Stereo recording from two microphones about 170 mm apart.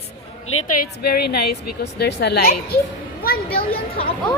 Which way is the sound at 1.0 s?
65° left (ahead or behind).